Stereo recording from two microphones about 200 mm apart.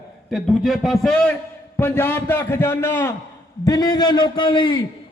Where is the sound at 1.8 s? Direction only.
10° left (ahead or behind).